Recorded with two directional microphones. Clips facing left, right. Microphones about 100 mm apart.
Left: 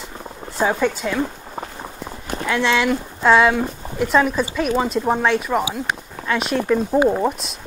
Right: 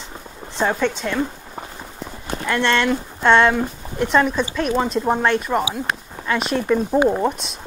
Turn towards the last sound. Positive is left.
turn(degrees=0)  # may be behind; listen again after turning